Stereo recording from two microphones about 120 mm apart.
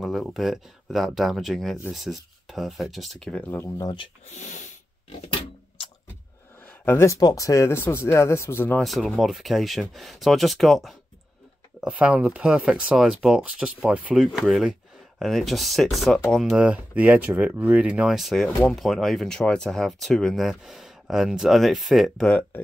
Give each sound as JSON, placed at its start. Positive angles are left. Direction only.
{"t": 0.0, "sound": "speech", "side_deg": 0}
{"t": 3.4, "sound": "speech", "side_deg": 20}
{"t": 3.7, "sound": "speech", "side_deg": 30}
{"t": 4.3, "sound": "a sound", "side_deg": 85}
{"t": 6.6, "sound": "a sound", "side_deg": 15}
{"t": 7.2, "sound": "speech", "side_deg": 30}
{"t": 8.7, "sound": "speech", "side_deg": 0}